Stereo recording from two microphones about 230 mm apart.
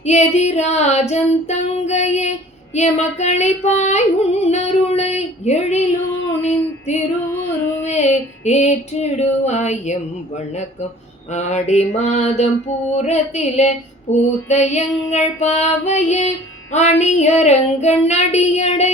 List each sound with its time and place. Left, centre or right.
0.0 s female singing: left
6.4 s a sound: left
7.9 s mantra: left
11.3 s mantra: left